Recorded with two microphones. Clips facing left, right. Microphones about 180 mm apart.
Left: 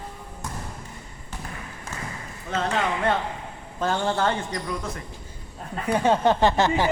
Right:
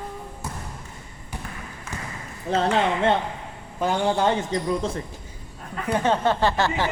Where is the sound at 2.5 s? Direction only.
30° right (ahead or behind).